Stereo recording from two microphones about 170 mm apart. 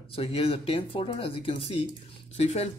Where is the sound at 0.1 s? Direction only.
35° left (ahead or behind).